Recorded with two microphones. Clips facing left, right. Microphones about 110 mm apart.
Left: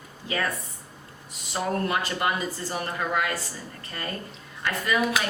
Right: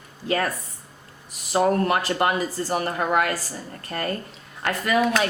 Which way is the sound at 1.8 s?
60° right (ahead or behind).